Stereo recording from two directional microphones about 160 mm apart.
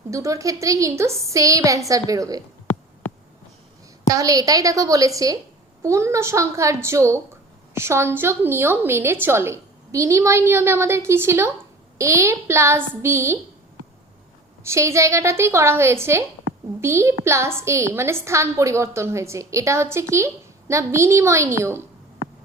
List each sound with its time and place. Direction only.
0.1 s a woman's voice: 20° right (ahead or behind)
4.1 s a woman's voice: 20° right (ahead or behind)
14.6 s a woman's voice: 15° right (ahead or behind)